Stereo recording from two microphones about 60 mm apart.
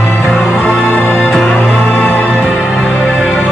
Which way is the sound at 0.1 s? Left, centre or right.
Centre.